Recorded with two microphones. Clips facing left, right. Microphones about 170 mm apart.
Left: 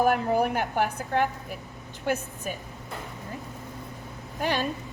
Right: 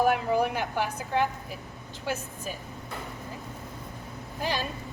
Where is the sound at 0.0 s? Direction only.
45° left (ahead or behind).